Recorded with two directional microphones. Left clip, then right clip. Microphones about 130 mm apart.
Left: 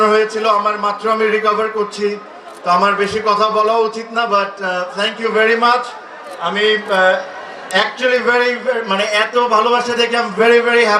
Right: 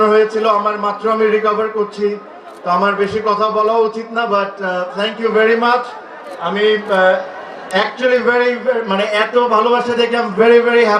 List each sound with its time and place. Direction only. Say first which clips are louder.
0.0 s a man's voice: right 1 dB; 10° right (ahead or behind)